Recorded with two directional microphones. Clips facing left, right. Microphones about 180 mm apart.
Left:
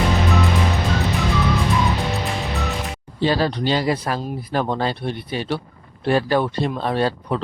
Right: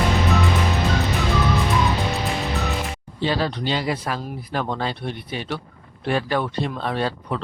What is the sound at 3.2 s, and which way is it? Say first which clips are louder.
Speech: left 4 dB; 40° left (ahead or behind).